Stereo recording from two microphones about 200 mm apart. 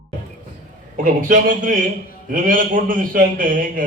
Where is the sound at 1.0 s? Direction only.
40° right (ahead or behind).